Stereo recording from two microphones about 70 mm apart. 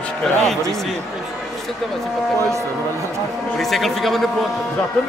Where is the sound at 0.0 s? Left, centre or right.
Centre.